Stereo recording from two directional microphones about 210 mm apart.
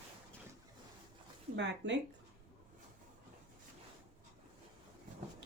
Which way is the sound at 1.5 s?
55° right (ahead or behind).